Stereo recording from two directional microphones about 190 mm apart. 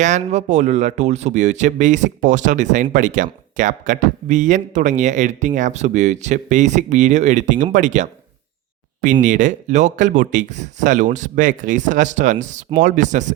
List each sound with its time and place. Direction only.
0.0 s speech: 35° right (ahead or behind)
9.2 s speech: 40° right (ahead or behind)